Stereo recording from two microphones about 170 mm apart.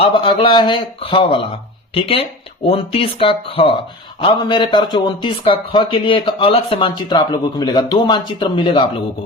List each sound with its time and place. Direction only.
0.0 s a man's voice: 30° left (ahead or behind)